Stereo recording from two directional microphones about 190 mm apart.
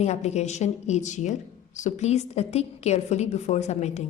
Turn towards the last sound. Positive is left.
turn(degrees=35)  # may be behind; listen again after turning